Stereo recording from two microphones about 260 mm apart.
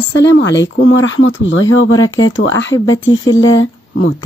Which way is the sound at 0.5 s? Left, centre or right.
Left.